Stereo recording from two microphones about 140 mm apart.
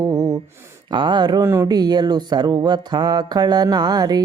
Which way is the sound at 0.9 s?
35° right (ahead or behind).